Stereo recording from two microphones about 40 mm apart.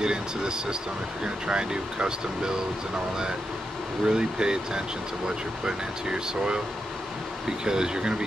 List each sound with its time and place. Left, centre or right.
0.0 s speech: centre
4.0 s speech: centre
7.6 s speech: centre